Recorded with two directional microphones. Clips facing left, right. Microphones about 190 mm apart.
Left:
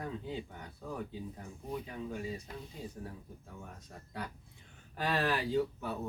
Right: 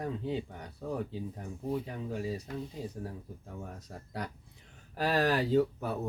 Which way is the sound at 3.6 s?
40° right (ahead or behind).